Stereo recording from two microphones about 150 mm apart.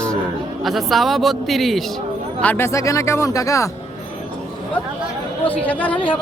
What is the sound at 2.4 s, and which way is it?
Speech, 15° left (ahead or behind).